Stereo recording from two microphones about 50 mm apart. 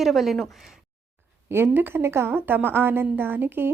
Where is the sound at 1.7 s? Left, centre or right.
Right.